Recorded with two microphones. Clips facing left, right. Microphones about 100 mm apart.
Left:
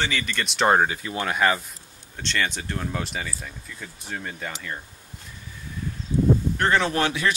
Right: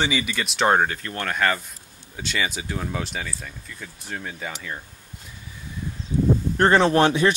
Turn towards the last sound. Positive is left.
turn(degrees=-30)  # may be behind; listen again after turning